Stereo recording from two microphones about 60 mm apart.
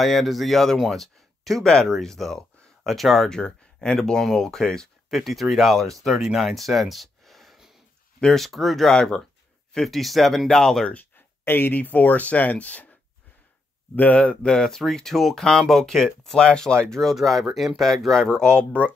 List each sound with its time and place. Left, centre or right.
0.0 s speech: centre
8.2 s speech: centre
8.5 s speech: centre
11.4 s speech: left
13.9 s speech: left
14.5 s speech: centre